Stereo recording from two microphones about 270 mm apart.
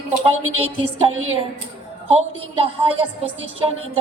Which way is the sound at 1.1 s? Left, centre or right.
Right.